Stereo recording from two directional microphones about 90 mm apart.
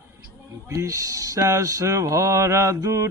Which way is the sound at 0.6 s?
40° right (ahead or behind).